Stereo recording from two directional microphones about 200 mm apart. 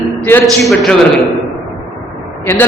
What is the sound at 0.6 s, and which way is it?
Speech, centre (ahead or behind).